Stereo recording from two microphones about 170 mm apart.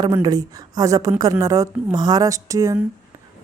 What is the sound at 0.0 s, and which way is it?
A woman's voice, 25° right (ahead or behind).